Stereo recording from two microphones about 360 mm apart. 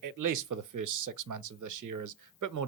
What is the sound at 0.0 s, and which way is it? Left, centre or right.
Speech, right.